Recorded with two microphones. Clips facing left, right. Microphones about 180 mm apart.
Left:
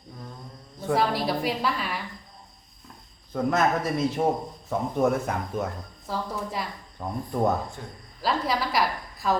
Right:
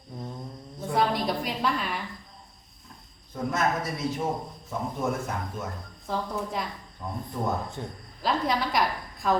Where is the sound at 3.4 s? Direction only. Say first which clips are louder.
Left 3 dB; 60° left (ahead or behind).